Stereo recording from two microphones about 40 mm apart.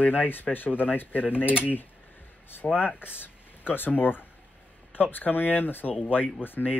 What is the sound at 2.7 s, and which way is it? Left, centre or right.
Speech, left.